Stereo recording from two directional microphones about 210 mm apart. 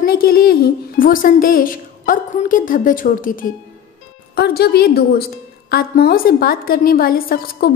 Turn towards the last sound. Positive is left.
turn(degrees=45)  # may be behind; listen again after turning